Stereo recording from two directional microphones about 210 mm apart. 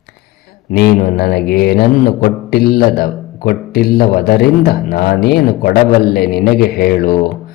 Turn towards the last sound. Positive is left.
turn(degrees=40)  # may be behind; listen again after turning